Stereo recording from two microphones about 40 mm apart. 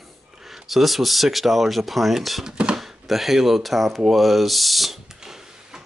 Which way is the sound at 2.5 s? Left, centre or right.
Right.